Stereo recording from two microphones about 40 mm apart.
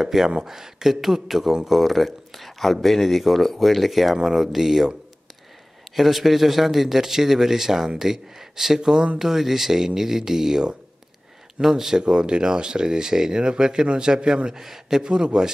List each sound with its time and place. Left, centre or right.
0.0 s a man's voice: centre
5.9 s a man's voice: centre
9.2 s a man's voice: centre
12.0 s speech: right